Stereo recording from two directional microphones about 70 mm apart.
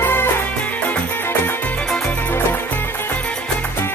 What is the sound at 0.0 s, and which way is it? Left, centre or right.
Music, left.